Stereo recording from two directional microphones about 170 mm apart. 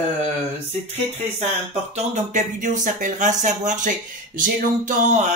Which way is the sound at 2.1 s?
45° right (ahead or behind).